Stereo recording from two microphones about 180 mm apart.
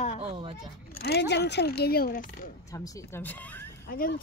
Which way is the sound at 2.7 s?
15° left (ahead or behind).